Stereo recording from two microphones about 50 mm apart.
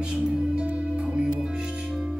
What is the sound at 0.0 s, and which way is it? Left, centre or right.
Music, centre.